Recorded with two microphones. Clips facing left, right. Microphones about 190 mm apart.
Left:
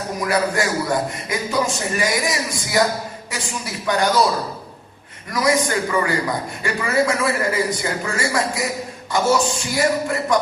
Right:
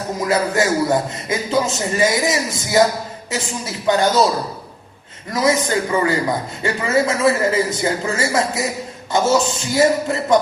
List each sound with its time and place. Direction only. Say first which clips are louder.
0.2 s a man's voice: right 2 dB; 25° right (ahead or behind)
5.3 s a man's voice: right 2 dB; 25° right (ahead or behind)